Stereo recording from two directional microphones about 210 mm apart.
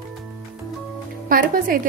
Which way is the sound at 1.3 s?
40° right (ahead or behind).